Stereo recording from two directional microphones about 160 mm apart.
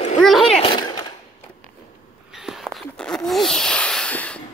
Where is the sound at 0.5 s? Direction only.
30° left (ahead or behind).